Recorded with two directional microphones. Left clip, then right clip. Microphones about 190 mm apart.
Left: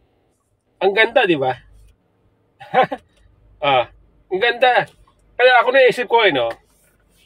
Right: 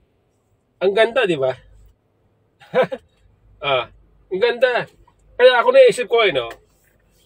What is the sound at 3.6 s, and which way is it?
Speech, 15° left (ahead or behind).